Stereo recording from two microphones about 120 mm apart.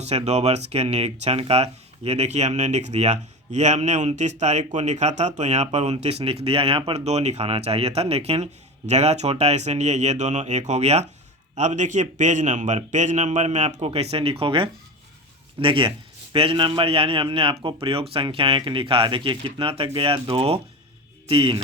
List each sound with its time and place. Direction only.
0.0 s speech: 65° right (ahead or behind)
11.5 s a man's voice: 80° right
13.8 s a man's voice: 55° right (ahead or behind)